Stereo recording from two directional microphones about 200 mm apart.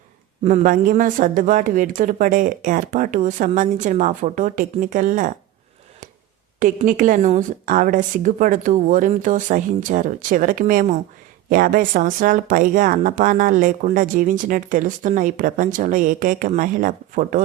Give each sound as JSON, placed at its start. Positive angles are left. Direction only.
{"t": 0.4, "sound": "speech", "side_deg": -40}
{"t": 6.6, "sound": "speech", "side_deg": -40}